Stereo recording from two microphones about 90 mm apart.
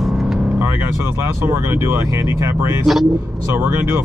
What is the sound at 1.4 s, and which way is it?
Speech, 30° right (ahead or behind).